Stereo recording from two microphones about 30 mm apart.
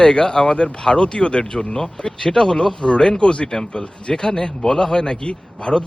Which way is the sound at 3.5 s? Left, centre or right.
Centre.